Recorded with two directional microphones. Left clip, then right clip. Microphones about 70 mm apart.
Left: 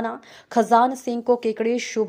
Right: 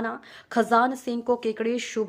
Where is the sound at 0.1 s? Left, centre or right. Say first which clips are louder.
Left 5 dB; left.